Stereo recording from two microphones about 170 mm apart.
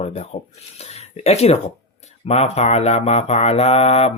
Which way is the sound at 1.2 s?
40° left (ahead or behind).